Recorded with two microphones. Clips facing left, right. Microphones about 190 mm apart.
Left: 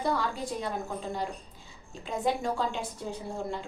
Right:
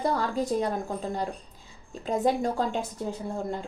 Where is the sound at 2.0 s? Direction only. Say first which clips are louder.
Right 5 dB; 40° right (ahead or behind).